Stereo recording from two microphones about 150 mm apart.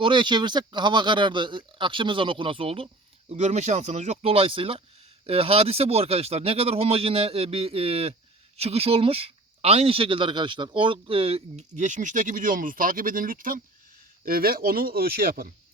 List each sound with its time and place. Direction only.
0.0 s a man's voice: 30° right (ahead or behind); by 15.5 s 85° right